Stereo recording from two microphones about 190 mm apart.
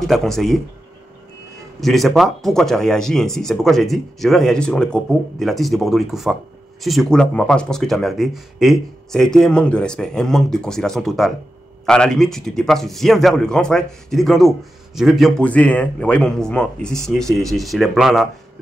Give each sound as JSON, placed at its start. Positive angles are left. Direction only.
{"t": 0.0, "sound": "speech", "side_deg": 0}
{"t": 1.8, "sound": "speech", "side_deg": 0}